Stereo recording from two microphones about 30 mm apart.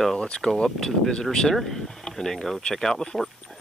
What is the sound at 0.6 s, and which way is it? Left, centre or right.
Speech, centre.